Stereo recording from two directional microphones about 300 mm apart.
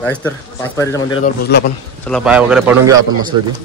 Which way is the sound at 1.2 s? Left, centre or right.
Left.